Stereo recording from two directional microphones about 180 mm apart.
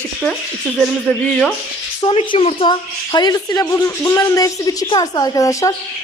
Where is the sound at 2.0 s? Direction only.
30° left (ahead or behind).